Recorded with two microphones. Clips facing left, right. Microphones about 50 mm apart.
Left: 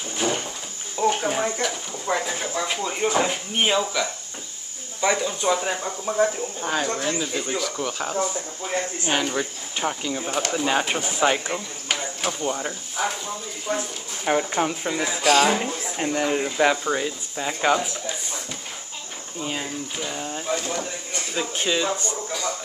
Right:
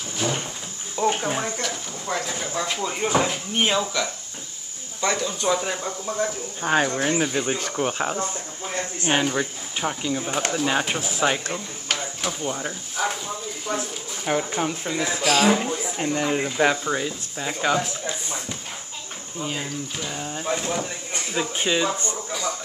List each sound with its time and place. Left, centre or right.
0.9 s a sound: centre
1.4 s speech: centre
6.6 s speech: right
7.0 s speech: right
7.7 s speech: right
9.0 s speech: centre
19.4 s speech: centre
20.4 s speech: centre